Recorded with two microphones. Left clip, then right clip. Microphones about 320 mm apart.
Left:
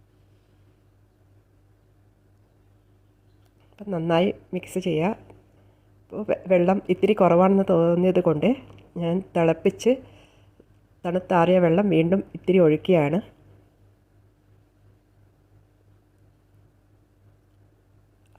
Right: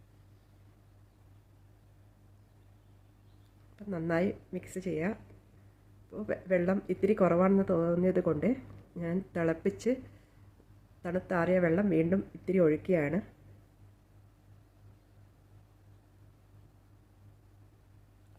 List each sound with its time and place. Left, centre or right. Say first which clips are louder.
3.8 s speech: left 10 dB; left
11.0 s speech: left 11 dB; left